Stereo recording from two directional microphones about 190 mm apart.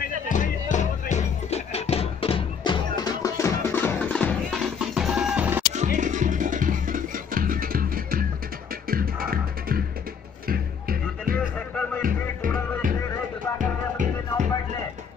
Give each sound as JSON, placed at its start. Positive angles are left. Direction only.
{"t": 0.3, "sound": "music", "side_deg": 40}
{"t": 5.8, "sound": "music", "side_deg": -40}